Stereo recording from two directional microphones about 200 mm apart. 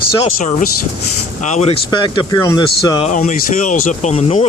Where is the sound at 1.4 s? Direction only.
35° left (ahead or behind).